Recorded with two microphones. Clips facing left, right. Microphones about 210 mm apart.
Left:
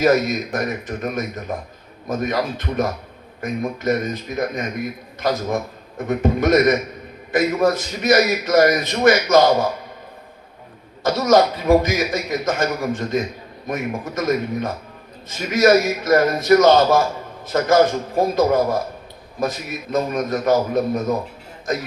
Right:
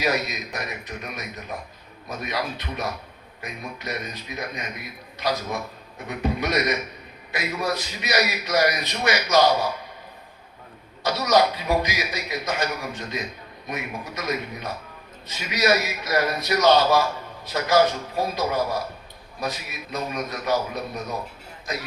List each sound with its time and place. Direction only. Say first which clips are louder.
0.0 s a man's voice: left 9 dB; 50° left (ahead or behind)
11.0 s a man's voice: left 5 dB; 50° left (ahead or behind)